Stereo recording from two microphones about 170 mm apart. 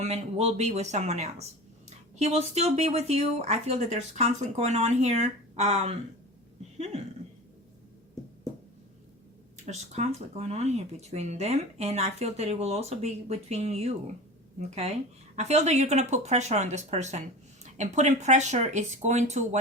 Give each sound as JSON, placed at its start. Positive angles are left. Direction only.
{"t": 0.0, "sound": "speech", "side_deg": -40}
{"t": 9.6, "sound": "speech", "side_deg": -40}
{"t": 15.4, "sound": "speech", "side_deg": -40}